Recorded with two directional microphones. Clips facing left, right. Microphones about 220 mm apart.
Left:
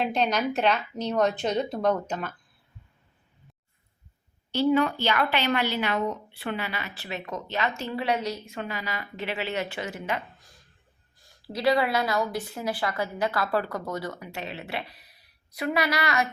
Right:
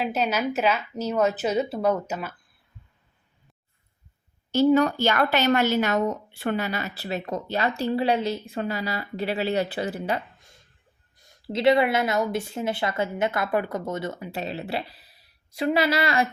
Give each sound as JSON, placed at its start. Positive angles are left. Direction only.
{"t": 0.0, "sound": "a woman's voice", "side_deg": -5}
{"t": 4.5, "sound": "a woman's voice", "side_deg": -40}
{"t": 11.2, "sound": "speech", "side_deg": -25}